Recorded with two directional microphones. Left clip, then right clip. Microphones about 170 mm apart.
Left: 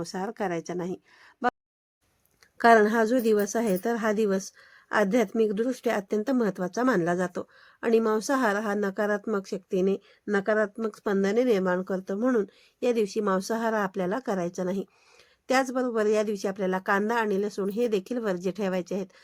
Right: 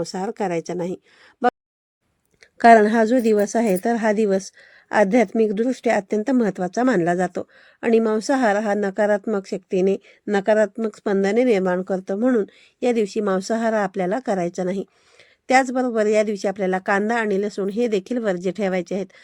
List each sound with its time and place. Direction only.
0.0 s speech: 25° right (ahead or behind)
2.6 s a woman's voice: 15° right (ahead or behind)